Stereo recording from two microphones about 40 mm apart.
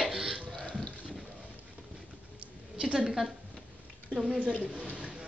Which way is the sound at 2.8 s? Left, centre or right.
Right.